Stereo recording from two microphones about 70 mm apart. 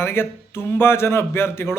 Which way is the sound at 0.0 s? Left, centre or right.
Left.